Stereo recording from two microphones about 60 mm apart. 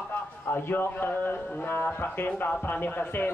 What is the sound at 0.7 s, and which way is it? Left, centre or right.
A man's voice, left.